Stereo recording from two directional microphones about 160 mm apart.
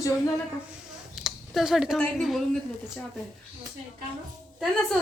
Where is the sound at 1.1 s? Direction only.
Centre (ahead or behind).